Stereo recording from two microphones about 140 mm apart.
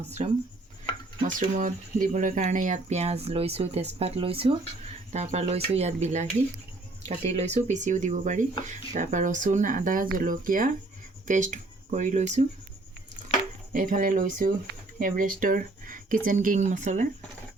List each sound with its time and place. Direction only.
1.4 s speech: 70° right (ahead or behind); by 4.5 s 40° right (ahead or behind)
5.1 s speech: 50° right (ahead or behind); by 10.7 s 75° right (ahead or behind)
11.3 s speech: 65° right (ahead or behind)
13.7 s speech: 80° right; by 17.1 s 60° right (ahead or behind)